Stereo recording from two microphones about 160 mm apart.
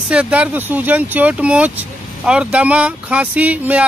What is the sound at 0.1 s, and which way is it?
Speech, 10° right (ahead or behind).